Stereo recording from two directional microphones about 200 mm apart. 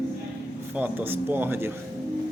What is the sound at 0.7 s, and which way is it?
Speech, 10° right (ahead or behind).